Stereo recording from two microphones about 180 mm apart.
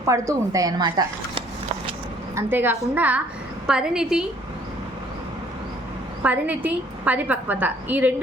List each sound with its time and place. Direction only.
0.0 s speech: 20° right (ahead or behind)
2.3 s a woman's voice: 10° right (ahead or behind)
6.2 s a woman's voice: 10° right (ahead or behind)